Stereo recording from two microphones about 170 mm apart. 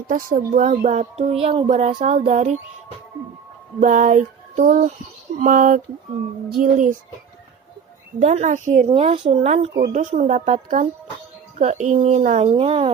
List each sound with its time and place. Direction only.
0.1 s child singing: 50° right (ahead or behind)
1.3 s child singing: 35° right (ahead or behind)
3.8 s child singing: 50° right (ahead or behind)
8.2 s child singing: 45° right (ahead or behind)
8.9 s speech: 35° right (ahead or behind)
9.9 s child singing: 45° right (ahead or behind)
11.5 s speech: 45° right (ahead or behind)